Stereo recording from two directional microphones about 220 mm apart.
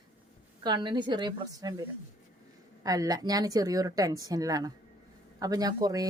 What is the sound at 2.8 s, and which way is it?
Speech, 15° right (ahead or behind).